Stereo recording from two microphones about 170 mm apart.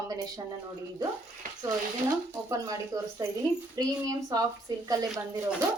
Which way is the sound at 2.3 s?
20° right (ahead or behind).